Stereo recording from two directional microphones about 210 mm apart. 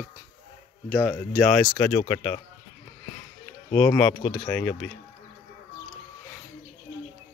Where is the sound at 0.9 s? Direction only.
5° left (ahead or behind).